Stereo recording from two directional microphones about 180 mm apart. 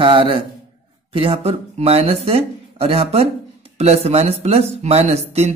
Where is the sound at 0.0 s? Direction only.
30° right (ahead or behind).